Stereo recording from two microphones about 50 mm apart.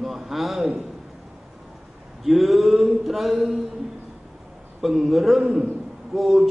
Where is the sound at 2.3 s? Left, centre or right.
Centre.